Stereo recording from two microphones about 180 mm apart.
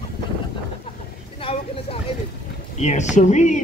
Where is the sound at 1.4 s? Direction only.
30° left (ahead or behind).